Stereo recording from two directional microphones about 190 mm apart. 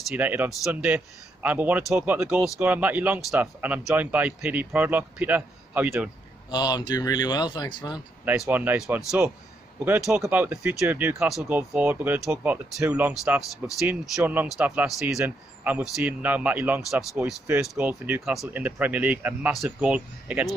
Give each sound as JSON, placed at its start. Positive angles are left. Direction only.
{"t": 0.1, "sound": "a man's voice", "side_deg": -10}
{"t": 6.5, "sound": "speech", "side_deg": 20}
{"t": 8.3, "sound": "a man's voice", "side_deg": -10}